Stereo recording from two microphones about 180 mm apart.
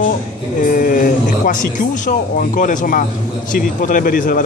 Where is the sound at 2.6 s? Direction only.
45° left (ahead or behind).